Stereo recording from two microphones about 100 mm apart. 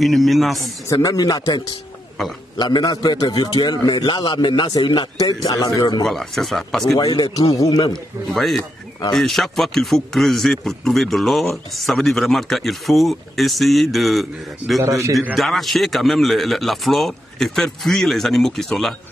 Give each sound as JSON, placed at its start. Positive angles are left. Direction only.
{"t": 0.0, "sound": "a man's voice", "side_deg": 0}
{"t": 1.0, "sound": "a man's voice", "side_deg": 40}
{"t": 6.0, "sound": "a man's voice", "side_deg": 0}
{"t": 7.0, "sound": "a man's voice", "side_deg": 45}
{"t": 8.3, "sound": "a man's voice", "side_deg": 5}
{"t": 14.8, "sound": "a man's voice", "side_deg": -30}
{"t": 15.3, "sound": "a man's voice", "side_deg": 0}